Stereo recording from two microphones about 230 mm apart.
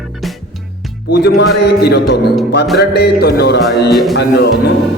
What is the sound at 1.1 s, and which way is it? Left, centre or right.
Music, left.